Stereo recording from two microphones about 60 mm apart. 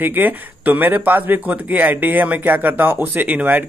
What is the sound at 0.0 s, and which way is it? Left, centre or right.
Speech, right.